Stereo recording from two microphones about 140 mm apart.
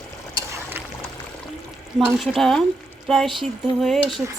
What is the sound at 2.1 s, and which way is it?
Speech, centre (ahead or behind).